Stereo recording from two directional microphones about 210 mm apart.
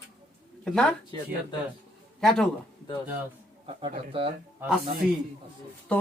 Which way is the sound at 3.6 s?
25° right (ahead or behind).